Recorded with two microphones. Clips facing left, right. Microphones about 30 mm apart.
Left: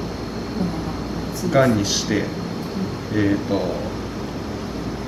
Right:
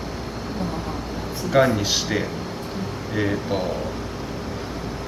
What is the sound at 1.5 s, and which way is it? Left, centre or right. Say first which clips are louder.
Speech: left 1 dB; centre.